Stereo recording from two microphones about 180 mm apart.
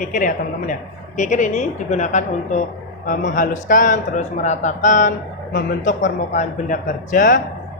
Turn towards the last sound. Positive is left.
turn(degrees=45)  # may be behind; listen again after turning